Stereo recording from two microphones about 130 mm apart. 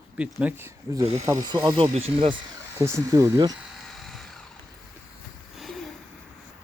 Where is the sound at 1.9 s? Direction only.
45° right (ahead or behind).